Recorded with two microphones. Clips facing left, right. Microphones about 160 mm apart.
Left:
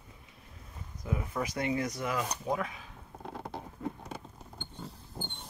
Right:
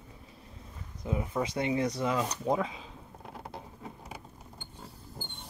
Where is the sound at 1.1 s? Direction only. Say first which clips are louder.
Right 3 dB; 20° right (ahead or behind).